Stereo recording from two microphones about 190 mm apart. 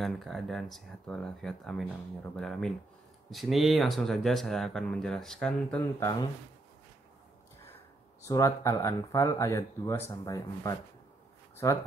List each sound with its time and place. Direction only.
0.0 s speech: centre (ahead or behind)
8.3 s speech: 15° left (ahead or behind)